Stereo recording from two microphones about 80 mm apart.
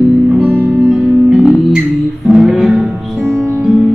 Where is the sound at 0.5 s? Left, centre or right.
Right.